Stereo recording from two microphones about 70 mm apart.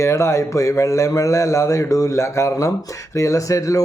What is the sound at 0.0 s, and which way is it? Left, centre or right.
A man's voice, left.